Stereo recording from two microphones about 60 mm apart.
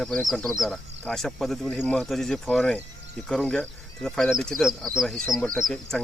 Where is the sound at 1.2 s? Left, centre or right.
Centre.